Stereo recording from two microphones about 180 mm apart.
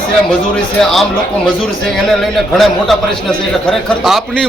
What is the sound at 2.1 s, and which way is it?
Speech, centre (ahead or behind).